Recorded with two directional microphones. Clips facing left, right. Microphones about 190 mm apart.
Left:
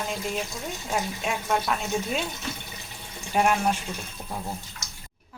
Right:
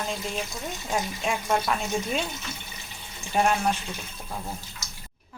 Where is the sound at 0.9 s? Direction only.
5° left (ahead or behind).